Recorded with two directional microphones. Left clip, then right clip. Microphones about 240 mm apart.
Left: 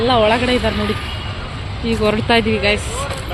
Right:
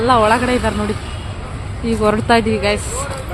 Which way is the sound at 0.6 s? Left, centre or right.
Right.